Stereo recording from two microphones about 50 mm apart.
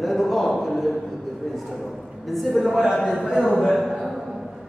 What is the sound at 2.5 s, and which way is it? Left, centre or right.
A man's voice, centre.